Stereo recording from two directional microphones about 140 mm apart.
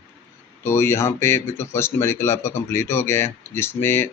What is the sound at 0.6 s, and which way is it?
Speech, 20° left (ahead or behind).